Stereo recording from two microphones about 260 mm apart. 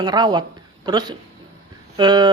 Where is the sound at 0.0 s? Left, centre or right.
Centre.